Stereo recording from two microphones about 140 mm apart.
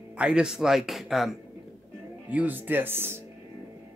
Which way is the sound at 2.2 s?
10° right (ahead or behind).